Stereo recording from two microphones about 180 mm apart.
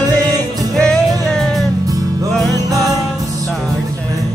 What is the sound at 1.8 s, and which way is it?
Music, 20° right (ahead or behind).